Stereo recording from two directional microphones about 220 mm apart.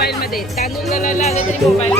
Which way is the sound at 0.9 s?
35° left (ahead or behind).